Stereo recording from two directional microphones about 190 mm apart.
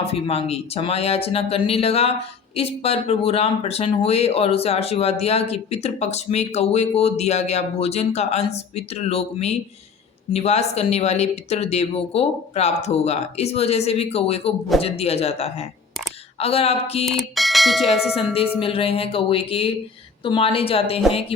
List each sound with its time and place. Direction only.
0.0 s speech: 30° left (ahead or behind)
17.1 s speech: centre (ahead or behind)
18.6 s music: 30° left (ahead or behind)
20.2 s speech: 30° left (ahead or behind)
21.1 s music: 30° left (ahead or behind)